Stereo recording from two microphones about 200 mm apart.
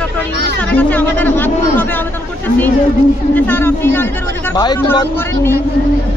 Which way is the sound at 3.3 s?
10° left (ahead or behind).